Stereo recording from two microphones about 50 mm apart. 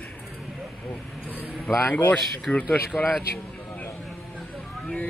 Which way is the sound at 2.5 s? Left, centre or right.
Left.